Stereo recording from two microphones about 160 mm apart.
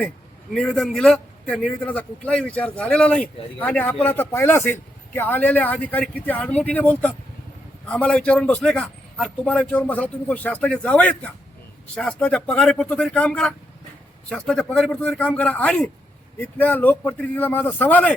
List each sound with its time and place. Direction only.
0.5 s a man's voice: 5° left (ahead or behind)